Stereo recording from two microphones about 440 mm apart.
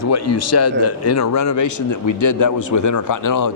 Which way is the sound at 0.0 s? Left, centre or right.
Left.